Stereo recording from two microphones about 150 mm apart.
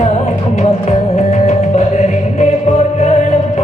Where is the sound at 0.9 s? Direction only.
50° left (ahead or behind).